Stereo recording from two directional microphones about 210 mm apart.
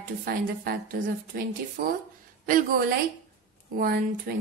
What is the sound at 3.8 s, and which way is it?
Speech, 45° right (ahead or behind).